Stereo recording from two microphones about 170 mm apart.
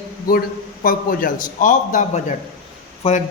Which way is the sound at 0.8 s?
55° left (ahead or behind).